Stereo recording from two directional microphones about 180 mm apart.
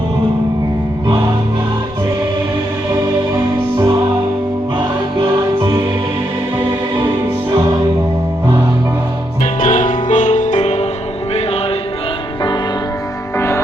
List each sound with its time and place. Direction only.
2.9 s music: 15° right (ahead or behind)
9.6 s music: 50° left (ahead or behind)
13.3 s music: 15° left (ahead or behind)